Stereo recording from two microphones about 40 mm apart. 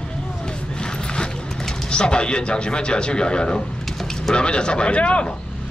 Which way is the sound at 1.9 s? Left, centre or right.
Left.